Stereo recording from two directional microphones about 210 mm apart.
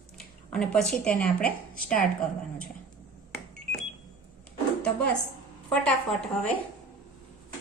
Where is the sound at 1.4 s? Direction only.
40° left (ahead or behind).